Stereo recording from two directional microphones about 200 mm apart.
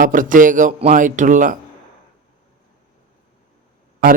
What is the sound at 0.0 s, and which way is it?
A man's voice, 40° right (ahead or behind).